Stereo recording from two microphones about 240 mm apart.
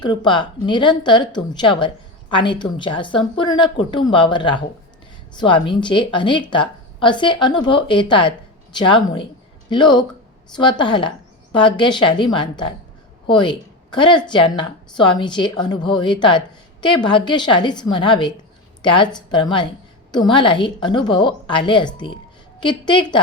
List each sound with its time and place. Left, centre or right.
0.0 s a woman's voice: centre